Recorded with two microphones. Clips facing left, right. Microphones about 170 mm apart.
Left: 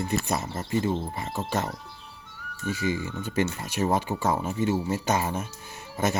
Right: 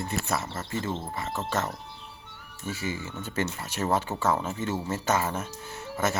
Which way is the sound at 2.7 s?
15° left (ahead or behind).